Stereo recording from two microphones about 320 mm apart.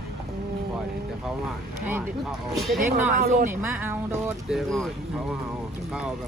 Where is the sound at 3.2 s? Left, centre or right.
Right.